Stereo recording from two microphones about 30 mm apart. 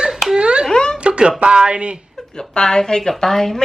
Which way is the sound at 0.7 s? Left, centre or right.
Left.